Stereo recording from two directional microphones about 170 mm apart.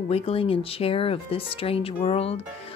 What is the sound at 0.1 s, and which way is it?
Speech, 35° left (ahead or behind).